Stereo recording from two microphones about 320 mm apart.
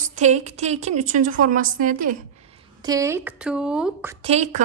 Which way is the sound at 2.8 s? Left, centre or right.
Centre.